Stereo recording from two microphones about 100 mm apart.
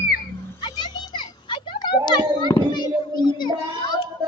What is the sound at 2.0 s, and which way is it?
Children playing, 45° left (ahead or behind).